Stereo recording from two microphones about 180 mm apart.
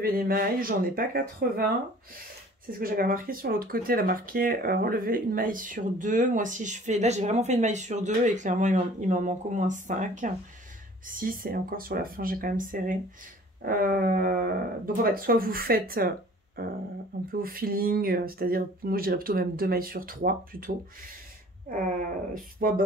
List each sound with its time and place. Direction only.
0.0 s speech: 55° right (ahead or behind)
2.7 s speech: 55° right (ahead or behind)